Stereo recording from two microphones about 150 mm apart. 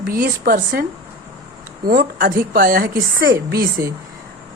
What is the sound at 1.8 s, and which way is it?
A woman's voice, 70° right (ahead or behind).